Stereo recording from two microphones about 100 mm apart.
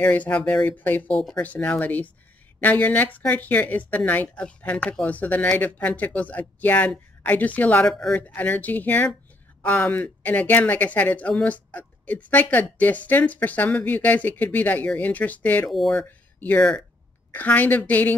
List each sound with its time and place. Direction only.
0.0 s speech: 15° left (ahead or behind)
1.1 s speech: 5° left (ahead or behind)
1.4 s speech: 15° left (ahead or behind)
15.7 s speech: centre (ahead or behind)
16.3 s speech: 15° left (ahead or behind)